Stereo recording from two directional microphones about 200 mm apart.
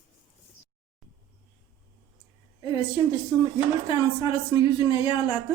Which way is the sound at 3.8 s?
25° left (ahead or behind).